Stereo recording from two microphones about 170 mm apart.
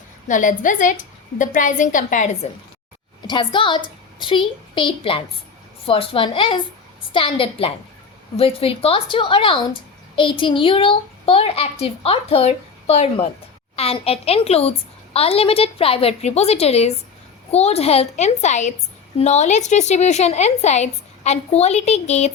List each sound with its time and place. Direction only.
0.3 s a woman's voice: 50° left (ahead or behind)
3.2 s a woman's voice: 25° left (ahead or behind)